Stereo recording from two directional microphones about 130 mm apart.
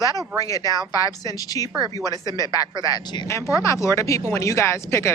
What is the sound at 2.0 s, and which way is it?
Speech, 25° right (ahead or behind).